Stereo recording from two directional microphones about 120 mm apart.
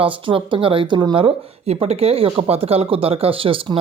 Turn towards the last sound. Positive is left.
turn(degrees=-50)  # may be behind; listen again after turning